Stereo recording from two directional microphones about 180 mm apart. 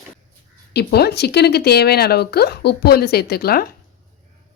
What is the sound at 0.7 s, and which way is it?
Speech, 65° left (ahead or behind).